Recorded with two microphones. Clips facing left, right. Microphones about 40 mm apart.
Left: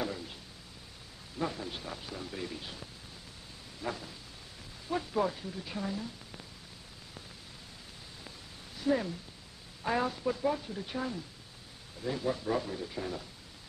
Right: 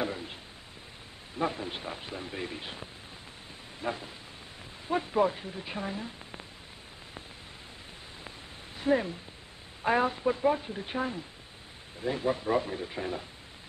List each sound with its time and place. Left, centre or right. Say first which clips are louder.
0.0 s a sound: right 3 dB; right
1.4 s speech: right 4 dB; right
8.7 s speech: right 3 dB; right